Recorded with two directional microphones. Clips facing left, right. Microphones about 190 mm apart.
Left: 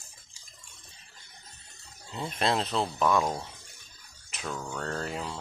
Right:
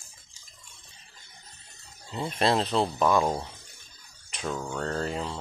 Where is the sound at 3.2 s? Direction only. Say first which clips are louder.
Right 3 dB; 25° right (ahead or behind).